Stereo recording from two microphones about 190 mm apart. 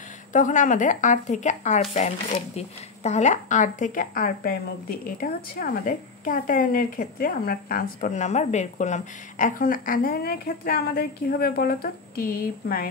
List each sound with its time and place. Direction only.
0.3 s speech: 40° left (ahead or behind)